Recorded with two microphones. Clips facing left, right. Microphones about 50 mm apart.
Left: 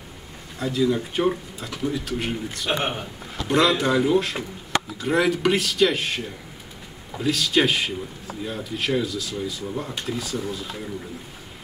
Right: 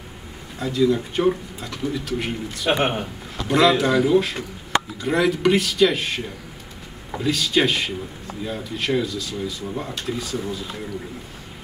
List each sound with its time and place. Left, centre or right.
0.6 s speech: centre
2.7 s a man's voice: right
3.4 s speech: centre